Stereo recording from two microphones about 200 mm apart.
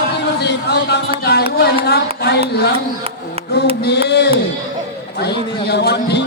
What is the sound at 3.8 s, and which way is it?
Speech, 55° left (ahead or behind).